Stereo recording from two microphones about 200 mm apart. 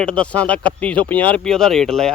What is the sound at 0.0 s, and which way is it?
A man's voice, 5° left (ahead or behind).